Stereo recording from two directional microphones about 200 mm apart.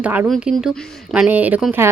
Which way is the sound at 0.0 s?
5° right (ahead or behind).